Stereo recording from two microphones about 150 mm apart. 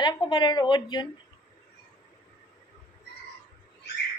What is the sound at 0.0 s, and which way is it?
A woman's voice, 30° left (ahead or behind).